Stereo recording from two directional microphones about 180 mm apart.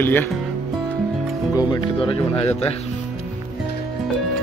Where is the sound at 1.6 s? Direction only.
25° left (ahead or behind).